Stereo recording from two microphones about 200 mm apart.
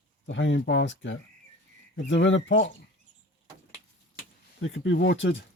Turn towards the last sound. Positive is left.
turn(degrees=65)  # may be behind; listen again after turning